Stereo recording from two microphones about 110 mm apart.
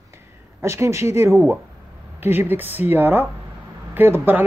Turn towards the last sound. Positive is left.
turn(degrees=-20)  # may be behind; listen again after turning